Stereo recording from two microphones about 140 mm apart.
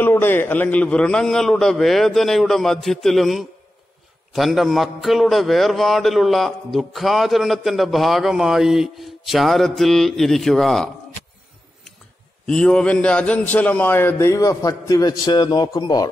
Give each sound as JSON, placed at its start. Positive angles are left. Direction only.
{"t": 0.0, "sound": "a man's voice", "side_deg": 15}
{"t": 12.4, "sound": "a man's voice", "side_deg": 5}